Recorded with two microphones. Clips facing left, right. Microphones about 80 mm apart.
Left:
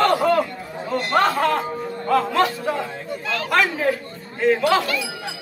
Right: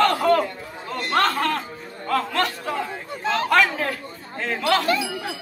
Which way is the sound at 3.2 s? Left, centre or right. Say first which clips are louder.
Right 5 dB; right.